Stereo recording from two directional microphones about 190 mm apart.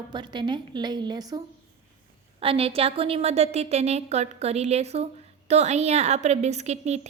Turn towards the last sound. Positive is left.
turn(degrees=-35)  # may be behind; listen again after turning